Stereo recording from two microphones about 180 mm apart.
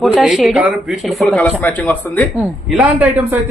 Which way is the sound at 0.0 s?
Centre (ahead or behind).